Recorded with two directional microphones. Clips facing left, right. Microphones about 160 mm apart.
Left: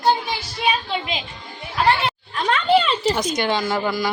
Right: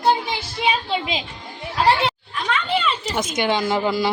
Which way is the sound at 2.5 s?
35° left (ahead or behind).